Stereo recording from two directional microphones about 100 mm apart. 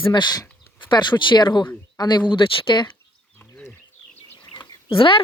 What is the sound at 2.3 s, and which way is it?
Speech, 60° left (ahead or behind).